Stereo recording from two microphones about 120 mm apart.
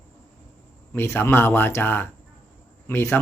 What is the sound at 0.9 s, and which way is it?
Speech, 20° left (ahead or behind).